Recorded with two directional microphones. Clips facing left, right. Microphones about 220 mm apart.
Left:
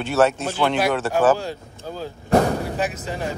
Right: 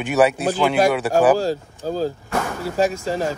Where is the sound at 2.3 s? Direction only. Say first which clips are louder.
Left 7 dB; 35° left (ahead or behind).